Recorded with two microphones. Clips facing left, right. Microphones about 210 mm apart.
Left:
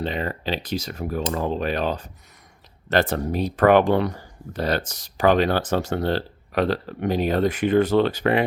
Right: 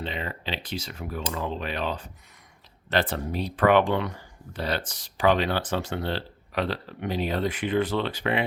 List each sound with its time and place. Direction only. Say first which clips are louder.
0.0 s speech: left 6 dB; 45° left (ahead or behind)